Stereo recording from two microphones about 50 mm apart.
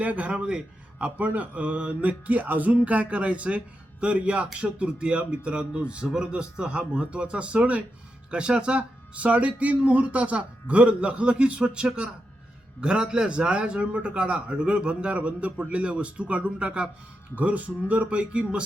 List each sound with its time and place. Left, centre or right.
0.0 s a man's voice: right